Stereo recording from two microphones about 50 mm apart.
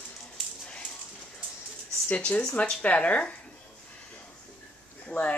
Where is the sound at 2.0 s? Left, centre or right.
Left.